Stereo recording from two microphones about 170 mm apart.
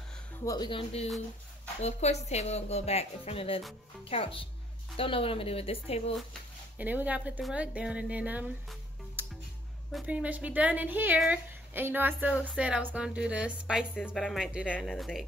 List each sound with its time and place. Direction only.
0.5 s speech: 25° left (ahead or behind)
6.8 s a woman's voice: 10° right (ahead or behind)